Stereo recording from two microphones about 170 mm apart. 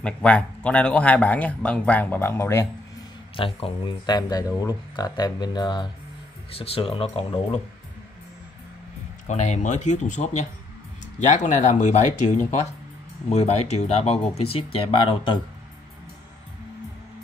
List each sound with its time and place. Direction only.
0.0 s speech: 5° left (ahead or behind)
3.3 s speech: 35° left (ahead or behind)
9.3 s speech: 45° left (ahead or behind)